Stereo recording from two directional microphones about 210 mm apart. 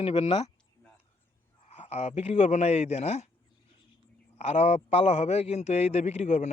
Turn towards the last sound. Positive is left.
turn(degrees=30)  # may be behind; listen again after turning